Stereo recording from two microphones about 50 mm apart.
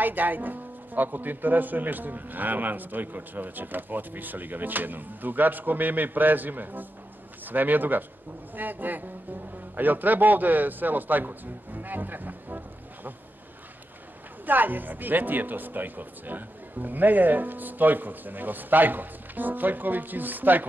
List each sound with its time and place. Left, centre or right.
0.0 s speech: right
14.4 s speech: right